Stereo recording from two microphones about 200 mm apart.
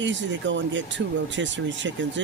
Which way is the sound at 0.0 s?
65° right (ahead or behind).